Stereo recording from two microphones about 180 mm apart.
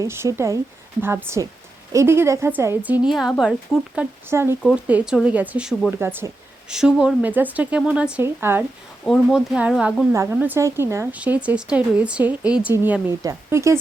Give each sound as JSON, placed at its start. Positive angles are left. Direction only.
{"t": 0.0, "sound": "speech", "side_deg": -15}
{"t": 3.9, "sound": "speech", "side_deg": -15}
{"t": 9.0, "sound": "speech", "side_deg": 0}
{"t": 10.1, "sound": "speech", "side_deg": -15}